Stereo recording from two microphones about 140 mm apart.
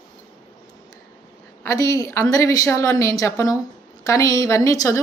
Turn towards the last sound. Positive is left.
turn(degrees=25)  # may be behind; listen again after turning